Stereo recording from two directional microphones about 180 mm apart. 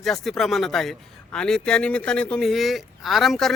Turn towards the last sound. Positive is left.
turn(degrees=0)  # may be behind; listen again after turning